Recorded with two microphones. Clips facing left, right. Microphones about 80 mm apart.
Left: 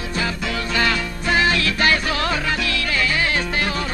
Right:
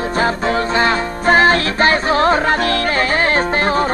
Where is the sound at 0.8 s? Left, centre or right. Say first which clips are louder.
Right 6 dB; right.